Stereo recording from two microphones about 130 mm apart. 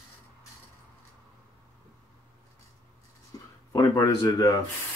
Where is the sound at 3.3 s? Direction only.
30° left (ahead or behind).